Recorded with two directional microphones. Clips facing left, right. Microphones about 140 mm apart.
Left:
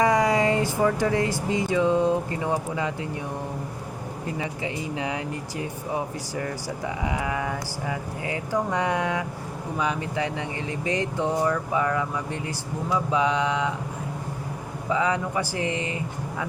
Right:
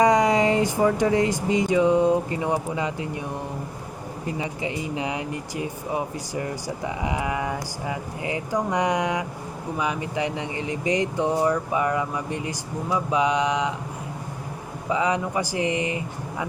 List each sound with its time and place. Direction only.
0.0 s speech: 20° right (ahead or behind)
4.4 s speech: 20° right (ahead or behind)
7.0 s speech: 20° right (ahead or behind)
14.9 s speech: 20° right (ahead or behind)